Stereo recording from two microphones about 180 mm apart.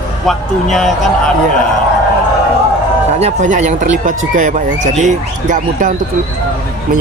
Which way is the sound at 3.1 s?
40° right (ahead or behind).